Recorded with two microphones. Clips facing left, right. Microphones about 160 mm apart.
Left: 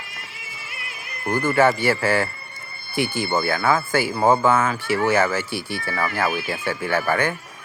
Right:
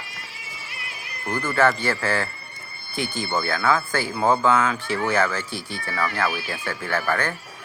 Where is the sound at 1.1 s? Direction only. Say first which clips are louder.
Left 4 dB; 25° left (ahead or behind).